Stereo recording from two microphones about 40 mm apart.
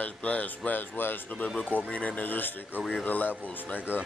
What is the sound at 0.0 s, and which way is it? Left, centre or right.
Speech, left.